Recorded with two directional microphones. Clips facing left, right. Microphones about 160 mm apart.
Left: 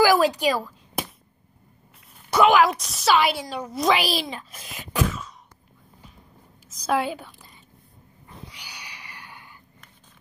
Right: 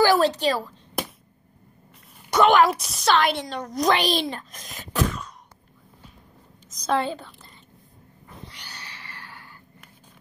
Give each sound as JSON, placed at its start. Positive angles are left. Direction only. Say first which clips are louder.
{"t": 0.0, "sound": "a woman's voice", "louder": "even", "side_deg": 10}
{"t": 2.3, "sound": "a woman's voice", "louder": "even", "side_deg": 5}
{"t": 6.7, "sound": "a woman's voice", "louder": "even", "side_deg": 5}
{"t": 8.5, "sound": "a sound", "louder": "right 1 dB", "side_deg": 10}